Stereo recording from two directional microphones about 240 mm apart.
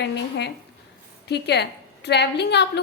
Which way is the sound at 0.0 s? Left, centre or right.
Left.